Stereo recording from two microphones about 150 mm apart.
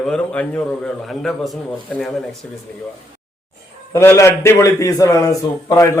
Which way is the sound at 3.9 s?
20° left (ahead or behind).